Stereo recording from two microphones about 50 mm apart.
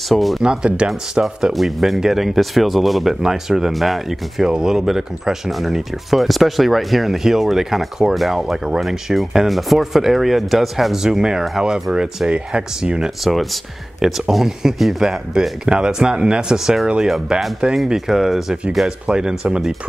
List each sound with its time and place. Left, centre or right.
0.1 s speech: centre
0.4 s speech: centre
1.5 s speech: centre
13.2 s speech: centre
18.9 s speech: centre